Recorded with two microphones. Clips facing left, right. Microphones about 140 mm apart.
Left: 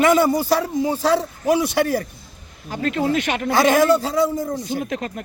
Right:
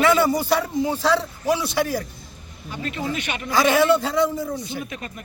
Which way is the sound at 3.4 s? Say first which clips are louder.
Left 2 dB; 50° left (ahead or behind).